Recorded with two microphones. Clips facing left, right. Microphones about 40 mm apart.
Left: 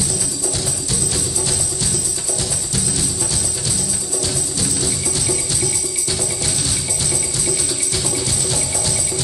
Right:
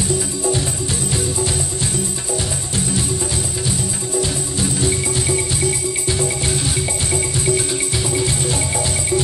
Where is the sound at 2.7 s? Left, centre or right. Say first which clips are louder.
Right 4 dB; right.